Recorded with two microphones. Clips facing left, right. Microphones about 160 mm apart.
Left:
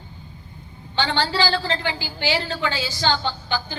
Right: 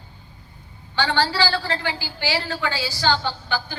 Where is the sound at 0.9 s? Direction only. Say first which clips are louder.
Right 1 dB; 20° left (ahead or behind).